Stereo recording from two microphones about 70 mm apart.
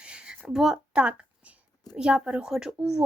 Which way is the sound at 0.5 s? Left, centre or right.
Centre.